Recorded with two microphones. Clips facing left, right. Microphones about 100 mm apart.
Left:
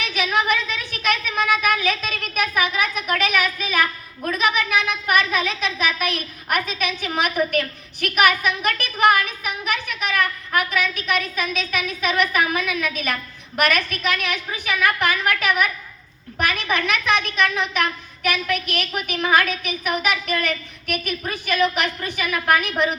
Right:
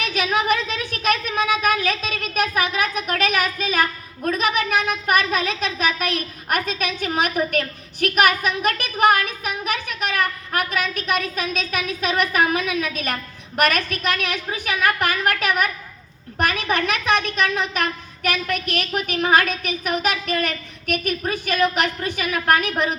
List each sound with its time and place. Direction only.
0.0 s a woman's voice: 40° right (ahead or behind)